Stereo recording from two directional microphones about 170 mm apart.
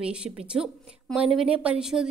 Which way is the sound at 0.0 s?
5° right (ahead or behind).